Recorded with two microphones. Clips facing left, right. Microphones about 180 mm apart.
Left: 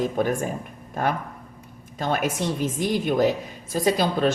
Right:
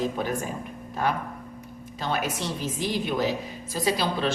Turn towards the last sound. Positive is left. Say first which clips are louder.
# left 4 dB
turn(degrees=45)  # may be behind; listen again after turning